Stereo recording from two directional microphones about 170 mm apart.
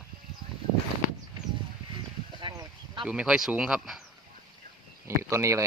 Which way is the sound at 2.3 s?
25° right (ahead or behind).